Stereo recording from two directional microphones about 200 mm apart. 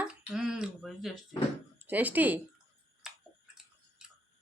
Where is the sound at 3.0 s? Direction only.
Centre (ahead or behind).